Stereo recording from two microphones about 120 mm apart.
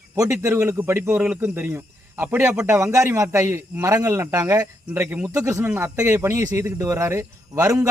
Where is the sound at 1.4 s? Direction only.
20° right (ahead or behind).